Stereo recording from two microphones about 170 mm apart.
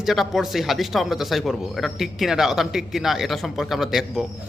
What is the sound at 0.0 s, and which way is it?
A man's voice, centre (ahead or behind).